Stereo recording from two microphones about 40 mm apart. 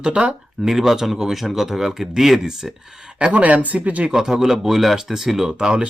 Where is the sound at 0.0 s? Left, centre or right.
Right.